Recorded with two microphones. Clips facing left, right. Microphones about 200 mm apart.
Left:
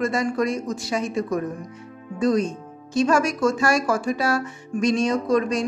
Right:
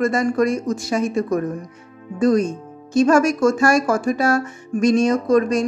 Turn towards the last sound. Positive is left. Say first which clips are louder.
# right 4 dB
turn(degrees=-45)  # may be behind; listen again after turning